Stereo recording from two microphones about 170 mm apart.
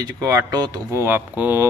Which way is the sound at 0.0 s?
20° right (ahead or behind).